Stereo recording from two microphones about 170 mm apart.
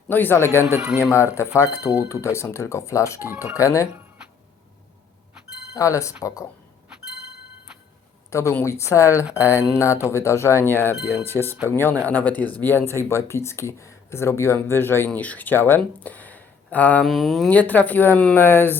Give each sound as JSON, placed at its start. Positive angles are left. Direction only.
{"t": 0.1, "sound": "speech", "side_deg": 10}
{"t": 0.6, "sound": "speech", "side_deg": -10}
{"t": 1.5, "sound": "speech", "side_deg": 15}
{"t": 3.2, "sound": "speech", "side_deg": -10}
{"t": 3.6, "sound": "speech", "side_deg": 20}
{"t": 5.7, "sound": "speech", "side_deg": 20}
{"t": 8.3, "sound": "speech", "side_deg": 15}
{"t": 11.4, "sound": "speech", "side_deg": -10}
{"t": 11.7, "sound": "speech", "side_deg": 10}